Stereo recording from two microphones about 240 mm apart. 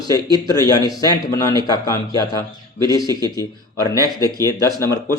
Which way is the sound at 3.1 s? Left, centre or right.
Centre.